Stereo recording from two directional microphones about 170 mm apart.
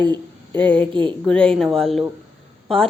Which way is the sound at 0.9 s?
30° right (ahead or behind).